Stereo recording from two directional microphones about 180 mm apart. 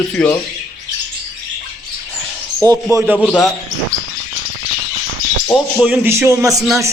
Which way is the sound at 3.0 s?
5° right (ahead or behind).